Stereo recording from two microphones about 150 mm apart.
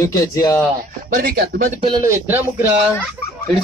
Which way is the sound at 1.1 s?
85° right.